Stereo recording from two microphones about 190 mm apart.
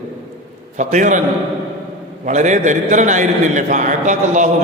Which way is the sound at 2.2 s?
40° right (ahead or behind).